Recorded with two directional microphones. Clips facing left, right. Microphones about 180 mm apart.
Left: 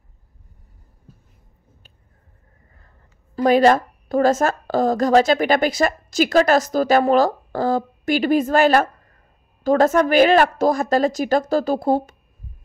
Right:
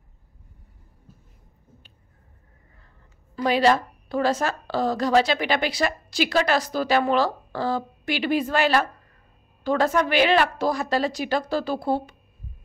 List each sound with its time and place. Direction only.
3.3 s a woman's voice: 45° left (ahead or behind)